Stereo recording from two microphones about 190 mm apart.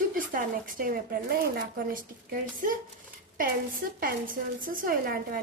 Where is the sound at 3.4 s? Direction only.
50° right (ahead or behind).